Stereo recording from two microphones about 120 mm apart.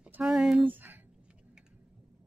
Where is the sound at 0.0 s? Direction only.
5° right (ahead or behind).